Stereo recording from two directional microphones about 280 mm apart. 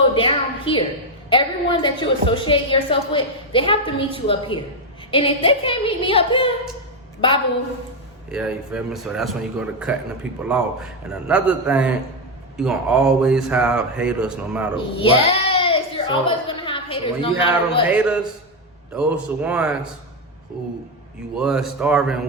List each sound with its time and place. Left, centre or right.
0.1 s a woman's voice: centre
8.3 s speech: centre
14.9 s a sound: centre
17.8 s speech: centre